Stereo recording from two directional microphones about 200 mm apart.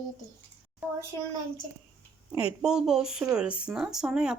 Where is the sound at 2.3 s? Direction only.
30° left (ahead or behind).